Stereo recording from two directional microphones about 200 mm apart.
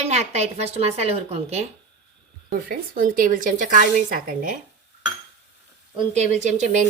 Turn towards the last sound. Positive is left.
turn(degrees=-35)  # may be behind; listen again after turning